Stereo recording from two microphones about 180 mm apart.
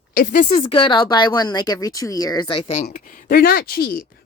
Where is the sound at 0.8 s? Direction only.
25° left (ahead or behind).